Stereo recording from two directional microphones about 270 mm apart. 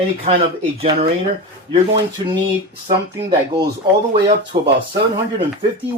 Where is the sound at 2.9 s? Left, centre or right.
Centre.